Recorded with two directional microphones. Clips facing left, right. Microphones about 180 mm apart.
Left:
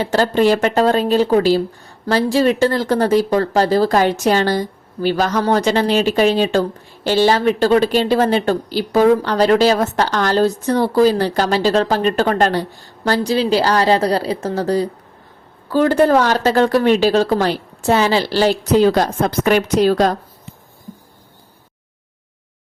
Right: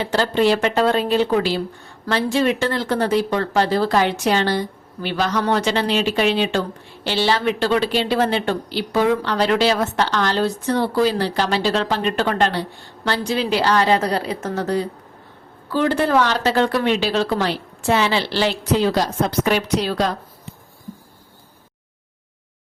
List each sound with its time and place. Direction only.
0.0 s speech: 45° left (ahead or behind)